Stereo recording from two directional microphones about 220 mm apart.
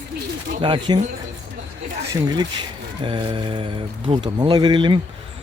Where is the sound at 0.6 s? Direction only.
20° right (ahead or behind).